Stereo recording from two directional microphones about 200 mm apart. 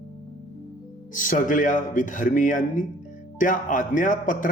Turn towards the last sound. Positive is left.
turn(degrees=40)  # may be behind; listen again after turning